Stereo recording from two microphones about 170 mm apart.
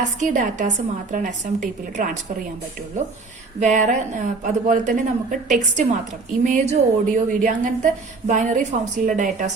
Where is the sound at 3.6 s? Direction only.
45° right (ahead or behind).